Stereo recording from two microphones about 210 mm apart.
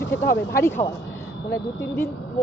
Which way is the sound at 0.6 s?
10° left (ahead or behind).